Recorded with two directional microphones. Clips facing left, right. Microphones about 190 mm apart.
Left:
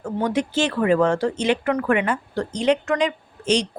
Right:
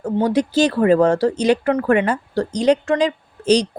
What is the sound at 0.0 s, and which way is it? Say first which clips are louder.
Speech: right 5 dB; 35° right (ahead or behind).